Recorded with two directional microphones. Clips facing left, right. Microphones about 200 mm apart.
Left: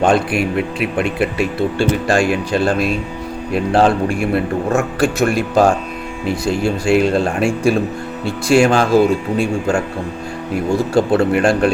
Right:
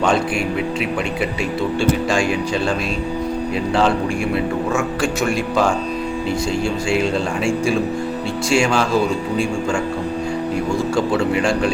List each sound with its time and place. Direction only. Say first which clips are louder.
0.0 s a man's voice: left 3 dB; 55° left (ahead or behind)
11.1 s a man's voice: left 4 dB; 55° left (ahead or behind)